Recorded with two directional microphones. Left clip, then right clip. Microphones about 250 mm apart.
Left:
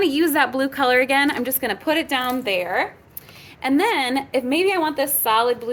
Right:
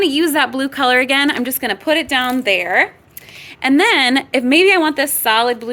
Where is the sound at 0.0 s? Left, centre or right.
Right.